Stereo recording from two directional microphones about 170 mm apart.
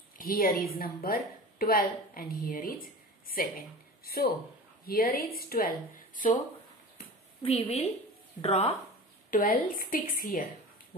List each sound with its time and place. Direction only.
0.2 s a woman's voice: 60° left (ahead or behind)
7.4 s a woman's voice: 35° left (ahead or behind)
9.3 s a woman's voice: 55° left (ahead or behind)